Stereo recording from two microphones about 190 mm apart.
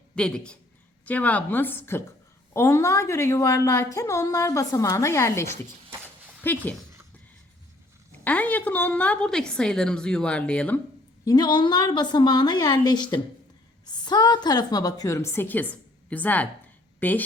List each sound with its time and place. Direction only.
0.2 s a woman's voice: 5° left (ahead or behind)
8.2 s a woman's voice: 5° left (ahead or behind)
11.3 s a woman's voice: 20° left (ahead or behind)